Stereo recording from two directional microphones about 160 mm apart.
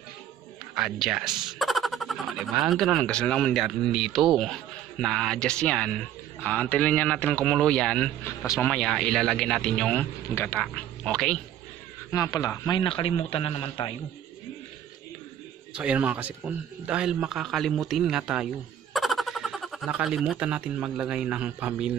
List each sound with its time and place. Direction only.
0.7 s speech: centre (ahead or behind)
12.1 s a man's voice: 20° left (ahead or behind)
15.7 s speech: 10° right (ahead or behind)